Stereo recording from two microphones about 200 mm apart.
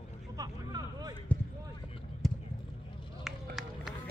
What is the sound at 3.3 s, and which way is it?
Run, centre (ahead or behind).